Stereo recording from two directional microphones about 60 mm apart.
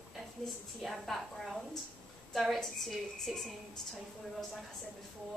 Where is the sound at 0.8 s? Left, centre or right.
Centre.